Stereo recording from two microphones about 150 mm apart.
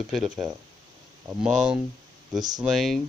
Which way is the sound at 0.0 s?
Centre (ahead or behind).